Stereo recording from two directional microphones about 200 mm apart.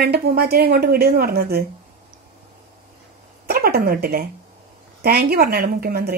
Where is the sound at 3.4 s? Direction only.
50° right (ahead or behind).